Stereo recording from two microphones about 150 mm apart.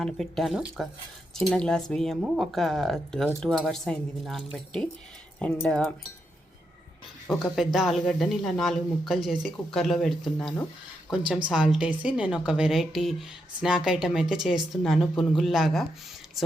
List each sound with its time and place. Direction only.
0.0 s speech: centre (ahead or behind)
7.3 s speech: centre (ahead or behind)